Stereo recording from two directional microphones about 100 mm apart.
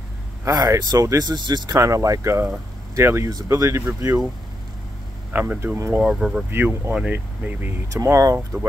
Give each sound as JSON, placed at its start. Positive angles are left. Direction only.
{"t": 0.5, "sound": "speech", "side_deg": -40}
{"t": 5.3, "sound": "speech", "side_deg": -20}
{"t": 5.9, "sound": "speech", "side_deg": -5}
{"t": 6.5, "sound": "speech", "side_deg": -20}
{"t": 7.9, "sound": "speech", "side_deg": -35}